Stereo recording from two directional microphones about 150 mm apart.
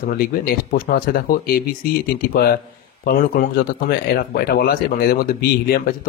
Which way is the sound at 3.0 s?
70° left (ahead or behind).